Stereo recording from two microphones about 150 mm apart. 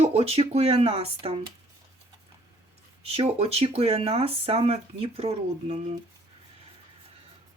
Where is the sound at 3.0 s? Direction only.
40° right (ahead or behind).